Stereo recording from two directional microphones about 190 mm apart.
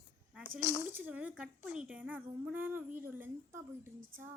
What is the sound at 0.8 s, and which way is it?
Speech, 10° right (ahead or behind).